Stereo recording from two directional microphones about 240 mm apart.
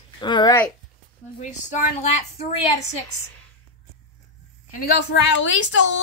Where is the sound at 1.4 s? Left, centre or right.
Left.